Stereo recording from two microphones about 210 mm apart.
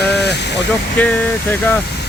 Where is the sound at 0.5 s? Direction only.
10° left (ahead or behind).